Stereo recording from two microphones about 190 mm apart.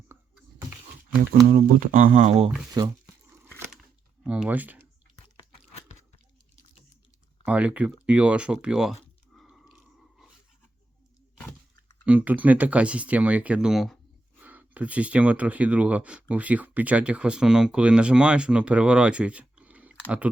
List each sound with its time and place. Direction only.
1.3 s speech: 50° right (ahead or behind)
2.8 s speech: 20° right (ahead or behind)
4.2 s speech: 5° right (ahead or behind)
7.4 s speech: 5° right (ahead or behind)
8.0 s a sound: 5° right (ahead or behind)
11.3 s breaking: 10° left (ahead or behind)
12.0 s speech: 10° right (ahead or behind)